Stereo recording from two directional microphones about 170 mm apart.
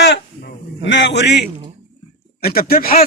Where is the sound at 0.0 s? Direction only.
90° left.